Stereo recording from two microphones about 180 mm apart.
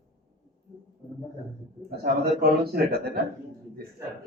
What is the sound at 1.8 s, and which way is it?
A man's voice, 55° right (ahead or behind).